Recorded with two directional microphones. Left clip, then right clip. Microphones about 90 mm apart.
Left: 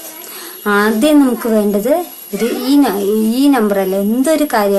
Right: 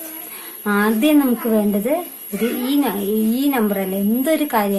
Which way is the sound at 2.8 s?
30° left (ahead or behind).